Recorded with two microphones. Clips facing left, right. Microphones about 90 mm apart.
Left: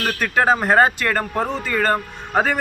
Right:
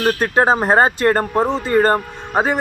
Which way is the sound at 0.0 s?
30° right (ahead or behind).